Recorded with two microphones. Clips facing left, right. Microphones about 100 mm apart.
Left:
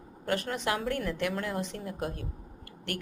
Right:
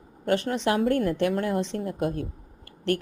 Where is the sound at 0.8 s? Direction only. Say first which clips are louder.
Right 8 dB; 50° right (ahead or behind).